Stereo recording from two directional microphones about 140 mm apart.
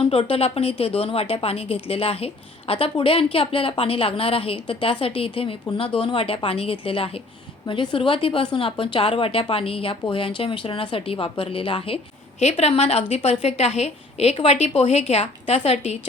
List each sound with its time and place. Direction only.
0.0 s a woman's voice: 45° left (ahead or behind)
12.4 s a woman's voice: 50° left (ahead or behind)